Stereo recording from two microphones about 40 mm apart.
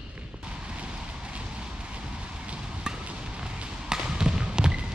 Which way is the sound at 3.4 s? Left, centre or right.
Centre.